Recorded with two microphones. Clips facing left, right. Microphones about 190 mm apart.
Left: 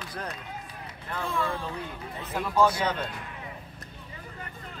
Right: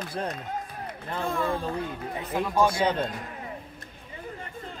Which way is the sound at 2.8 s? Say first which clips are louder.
Right 4 dB; 30° right (ahead or behind).